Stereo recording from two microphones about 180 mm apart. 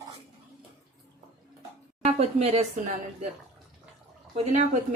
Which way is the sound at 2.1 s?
35° right (ahead or behind).